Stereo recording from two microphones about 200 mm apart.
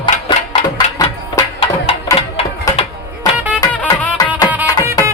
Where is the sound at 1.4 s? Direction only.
20° left (ahead or behind).